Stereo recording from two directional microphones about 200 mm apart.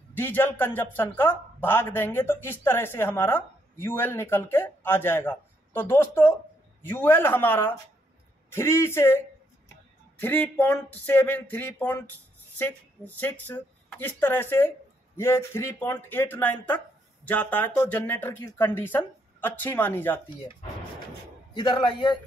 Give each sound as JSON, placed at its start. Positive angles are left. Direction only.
{"t": 0.1, "sound": "speech", "side_deg": 10}
{"t": 21.5, "sound": "a man's voice", "side_deg": 25}